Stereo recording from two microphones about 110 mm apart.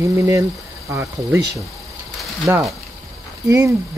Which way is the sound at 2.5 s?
15° right (ahead or behind).